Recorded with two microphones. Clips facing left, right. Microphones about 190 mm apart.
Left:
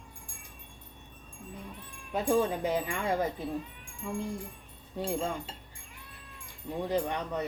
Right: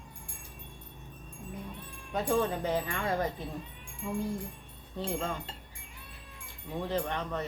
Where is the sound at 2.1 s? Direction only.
10° left (ahead or behind).